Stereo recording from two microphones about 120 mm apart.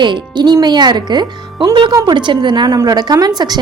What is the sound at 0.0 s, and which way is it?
A woman's voice, 40° right (ahead or behind).